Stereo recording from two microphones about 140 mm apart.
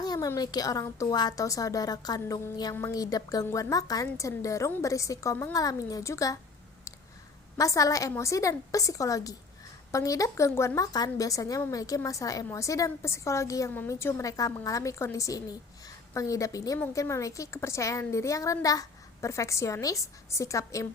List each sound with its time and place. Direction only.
0.0 s a woman's voice: 25° left (ahead or behind)
7.5 s a woman's voice: 20° left (ahead or behind)